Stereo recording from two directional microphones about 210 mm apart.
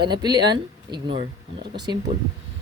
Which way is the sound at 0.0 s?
20° right (ahead or behind).